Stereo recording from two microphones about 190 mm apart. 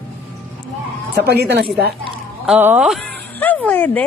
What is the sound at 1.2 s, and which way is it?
Speech, 60° right (ahead or behind).